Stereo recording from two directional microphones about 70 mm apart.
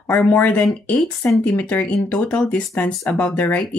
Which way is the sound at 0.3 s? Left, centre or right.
Left.